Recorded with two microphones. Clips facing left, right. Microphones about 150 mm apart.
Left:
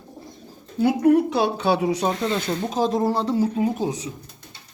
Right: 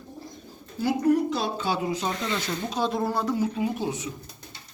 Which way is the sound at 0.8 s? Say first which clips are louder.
Left 5 dB; 60° left (ahead or behind).